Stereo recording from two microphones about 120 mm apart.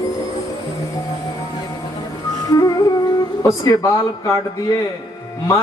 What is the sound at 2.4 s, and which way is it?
Music, 35° left (ahead or behind).